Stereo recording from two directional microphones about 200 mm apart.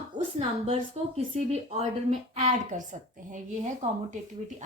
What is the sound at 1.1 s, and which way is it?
A woman's voice, 30° right (ahead or behind).